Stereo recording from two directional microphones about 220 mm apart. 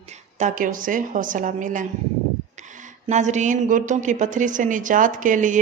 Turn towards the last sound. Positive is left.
turn(degrees=-35)  # may be behind; listen again after turning